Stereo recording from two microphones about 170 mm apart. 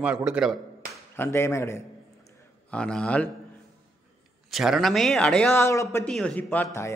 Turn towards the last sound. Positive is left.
turn(degrees=5)  # may be behind; listen again after turning